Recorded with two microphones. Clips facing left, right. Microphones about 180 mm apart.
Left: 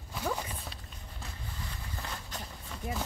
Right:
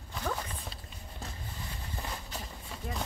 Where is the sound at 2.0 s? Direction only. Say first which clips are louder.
Right 1 dB; 15° right (ahead or behind).